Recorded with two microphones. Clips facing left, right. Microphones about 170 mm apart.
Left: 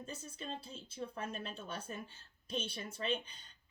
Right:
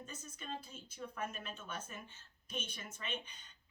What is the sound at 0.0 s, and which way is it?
Speech, 30° left (ahead or behind).